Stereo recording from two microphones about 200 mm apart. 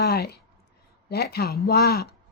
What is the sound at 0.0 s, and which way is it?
A woman's voice, 50° left (ahead or behind).